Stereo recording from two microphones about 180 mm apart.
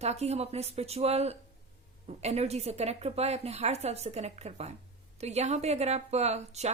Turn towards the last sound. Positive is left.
turn(degrees=-40)  # may be behind; listen again after turning